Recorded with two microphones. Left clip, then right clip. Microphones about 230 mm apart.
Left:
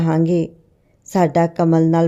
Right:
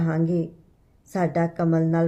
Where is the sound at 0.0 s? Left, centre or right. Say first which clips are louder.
Left 8 dB; left.